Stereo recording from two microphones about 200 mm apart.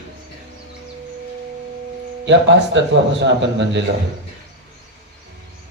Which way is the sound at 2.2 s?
60° right (ahead or behind).